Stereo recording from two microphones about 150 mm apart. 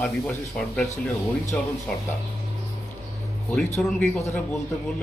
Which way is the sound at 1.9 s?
10° left (ahead or behind).